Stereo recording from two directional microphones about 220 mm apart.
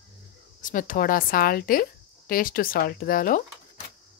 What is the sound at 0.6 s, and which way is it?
A woman's voice, 40° left (ahead or behind).